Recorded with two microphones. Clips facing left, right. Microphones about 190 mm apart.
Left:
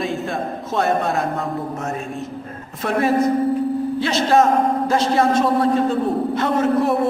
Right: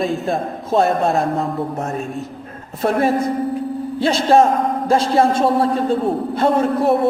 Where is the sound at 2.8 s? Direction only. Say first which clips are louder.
Right 1 dB; 30° right (ahead or behind).